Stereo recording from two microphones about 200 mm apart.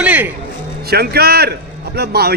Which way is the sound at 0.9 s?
50° right (ahead or behind).